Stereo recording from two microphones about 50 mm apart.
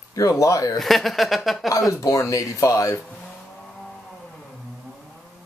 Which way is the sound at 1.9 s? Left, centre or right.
Left.